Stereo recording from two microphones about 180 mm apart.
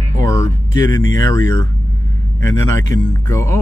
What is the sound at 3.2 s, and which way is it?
Speech, 15° left (ahead or behind).